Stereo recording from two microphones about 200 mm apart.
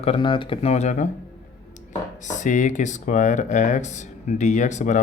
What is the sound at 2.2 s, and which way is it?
Speech, 40° left (ahead or behind).